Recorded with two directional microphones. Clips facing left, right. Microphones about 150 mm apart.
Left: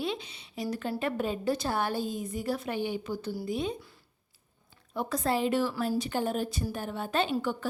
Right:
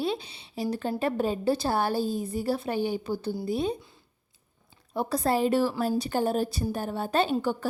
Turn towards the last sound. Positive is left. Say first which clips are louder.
# right 3 dB
turn(degrees=-35)  # may be behind; listen again after turning